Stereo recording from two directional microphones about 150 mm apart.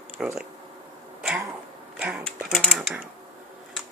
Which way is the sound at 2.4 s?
Centre (ahead or behind).